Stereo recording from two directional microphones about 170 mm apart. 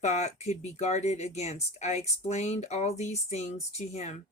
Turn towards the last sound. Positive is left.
turn(degrees=40)  # may be behind; listen again after turning